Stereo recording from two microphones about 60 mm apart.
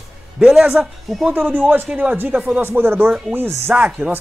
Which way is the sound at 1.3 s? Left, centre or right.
Right.